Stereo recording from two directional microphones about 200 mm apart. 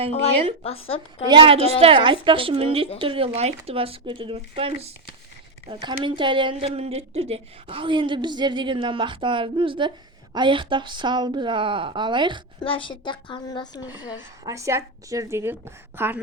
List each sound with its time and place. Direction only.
0.6 s a woman's voice: 30° left (ahead or behind)
1.3 s speech: 25° right (ahead or behind)
6.0 s speech: 25° right (ahead or behind)
12.5 s a woman's voice: 25° left (ahead or behind)
14.4 s a woman's voice: 15° right (ahead or behind)